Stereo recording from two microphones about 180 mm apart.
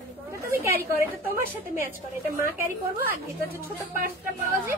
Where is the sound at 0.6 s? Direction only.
10° right (ahead or behind).